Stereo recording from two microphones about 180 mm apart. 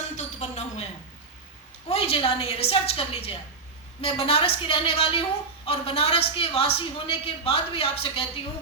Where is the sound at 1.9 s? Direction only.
30° left (ahead or behind).